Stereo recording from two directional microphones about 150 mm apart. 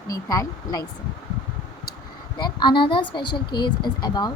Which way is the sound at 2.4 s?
30° left (ahead or behind).